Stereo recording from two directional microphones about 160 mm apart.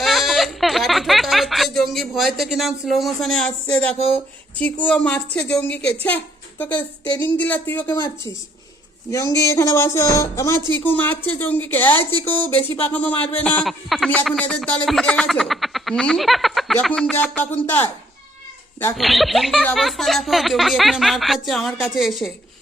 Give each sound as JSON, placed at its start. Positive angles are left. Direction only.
{"t": 0.0, "sound": "a sound", "side_deg": 0}
{"t": 4.1, "sound": "speech", "side_deg": 10}
{"t": 9.0, "sound": "speech", "side_deg": 20}
{"t": 18.9, "sound": "speech", "side_deg": 0}